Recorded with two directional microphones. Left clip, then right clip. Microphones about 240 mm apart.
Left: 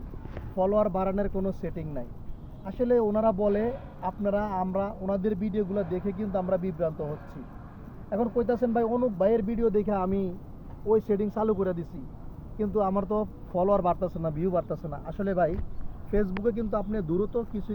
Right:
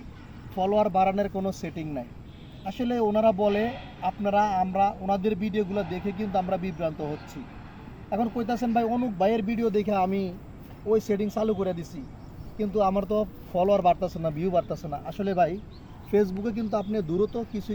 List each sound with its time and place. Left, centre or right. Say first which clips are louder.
0.5 s speech: right 2 dB; centre
9.2 s speech: right 1 dB; centre
9.5 s speech: even; centre
11.3 s speech: even; centre